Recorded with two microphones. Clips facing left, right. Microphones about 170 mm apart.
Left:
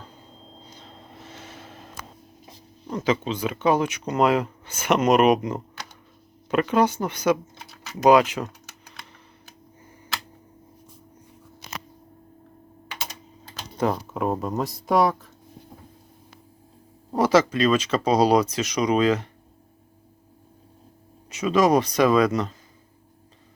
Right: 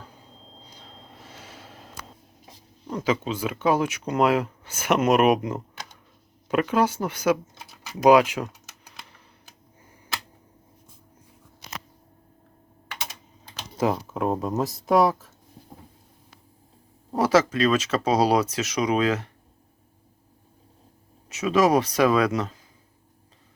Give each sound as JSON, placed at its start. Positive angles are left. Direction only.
{"t": 0.7, "sound": "a sound", "side_deg": -10}
{"t": 2.8, "sound": "speech", "side_deg": -5}
{"t": 7.9, "sound": "typing", "side_deg": -10}
{"t": 13.7, "sound": "speech", "side_deg": -5}
{"t": 17.1, "sound": "speech", "side_deg": -5}
{"t": 21.2, "sound": "speech", "side_deg": -5}